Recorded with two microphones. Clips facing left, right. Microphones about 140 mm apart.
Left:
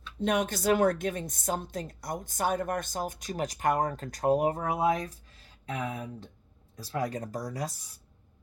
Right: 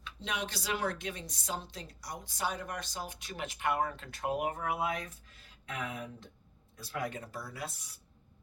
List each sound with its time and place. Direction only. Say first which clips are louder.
0.2 s a woman's voice: left 10 dB; 50° left (ahead or behind)